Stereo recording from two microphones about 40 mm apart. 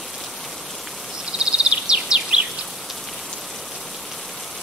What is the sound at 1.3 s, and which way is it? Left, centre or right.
Bird vocalization, right.